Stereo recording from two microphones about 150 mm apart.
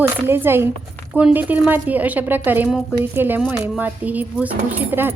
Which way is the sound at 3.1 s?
15° right (ahead or behind).